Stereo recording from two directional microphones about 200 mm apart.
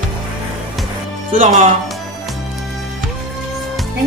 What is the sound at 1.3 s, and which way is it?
Speech, 35° right (ahead or behind).